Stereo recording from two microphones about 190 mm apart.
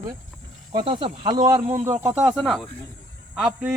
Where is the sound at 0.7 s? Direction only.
25° right (ahead or behind); by 3.7 s centre (ahead or behind).